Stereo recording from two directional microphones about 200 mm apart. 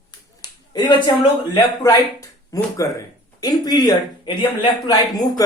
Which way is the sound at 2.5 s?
15° left (ahead or behind).